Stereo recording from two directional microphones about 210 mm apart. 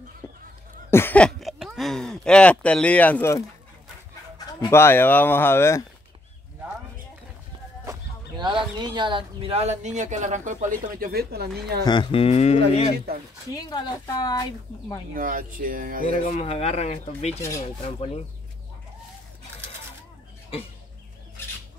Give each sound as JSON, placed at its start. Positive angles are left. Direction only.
{"t": 0.2, "sound": "fowl", "side_deg": 15}
{"t": 0.8, "sound": "speech", "side_deg": 10}
{"t": 4.5, "sound": "speech", "side_deg": 15}
{"t": 7.8, "sound": "a sound", "side_deg": -15}
{"t": 8.7, "sound": "speech", "side_deg": -20}
{"t": 11.8, "sound": "speech", "side_deg": 20}
{"t": 13.6, "sound": "speech", "side_deg": 20}
{"t": 15.1, "sound": "speech", "side_deg": -40}
{"t": 16.1, "sound": "speech", "side_deg": 30}